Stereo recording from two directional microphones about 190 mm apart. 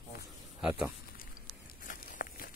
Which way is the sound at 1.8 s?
45° left (ahead or behind).